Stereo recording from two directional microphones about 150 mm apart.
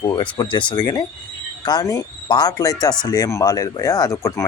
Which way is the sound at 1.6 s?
25° left (ahead or behind).